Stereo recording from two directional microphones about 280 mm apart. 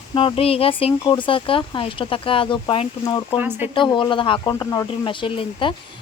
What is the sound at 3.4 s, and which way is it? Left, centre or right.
Speech, centre.